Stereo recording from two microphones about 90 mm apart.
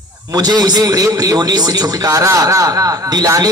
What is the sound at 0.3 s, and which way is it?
A man's voice, 50° right (ahead or behind).